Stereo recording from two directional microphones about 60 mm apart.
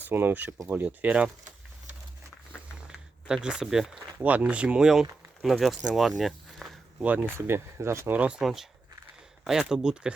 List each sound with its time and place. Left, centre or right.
0.0 s speech: right
1.0 s speech: centre
2.8 s speech: centre
4.2 s speech: right
4.9 s speech: centre
7.0 s speech: right
7.3 s speech: right
8.1 s speech: right
8.4 s speech: centre